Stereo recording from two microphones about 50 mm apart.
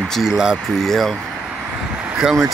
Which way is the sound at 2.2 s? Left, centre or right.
Centre.